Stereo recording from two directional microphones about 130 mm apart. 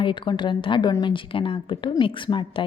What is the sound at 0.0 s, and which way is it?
A woman's voice, 35° left (ahead or behind).